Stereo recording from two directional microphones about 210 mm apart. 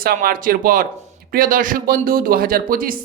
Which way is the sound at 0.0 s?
45° right (ahead or behind).